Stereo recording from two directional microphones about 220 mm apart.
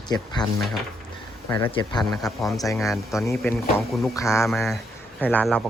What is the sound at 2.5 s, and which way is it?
Speech, 15° left (ahead or behind).